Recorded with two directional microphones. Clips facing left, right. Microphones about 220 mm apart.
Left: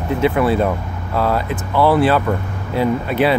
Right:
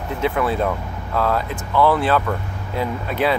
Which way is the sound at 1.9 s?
5° left (ahead or behind).